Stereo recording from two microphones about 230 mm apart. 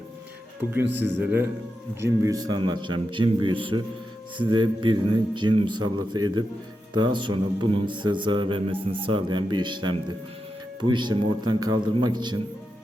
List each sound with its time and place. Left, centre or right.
0.7 s speech: centre
6.9 s speech: centre